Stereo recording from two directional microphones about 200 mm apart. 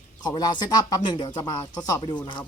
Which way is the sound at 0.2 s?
20° left (ahead or behind).